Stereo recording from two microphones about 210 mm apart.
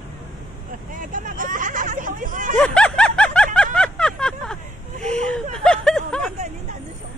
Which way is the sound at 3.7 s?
5° left (ahead or behind).